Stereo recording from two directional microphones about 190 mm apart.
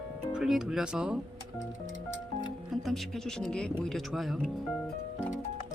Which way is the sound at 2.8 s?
Centre (ahead or behind).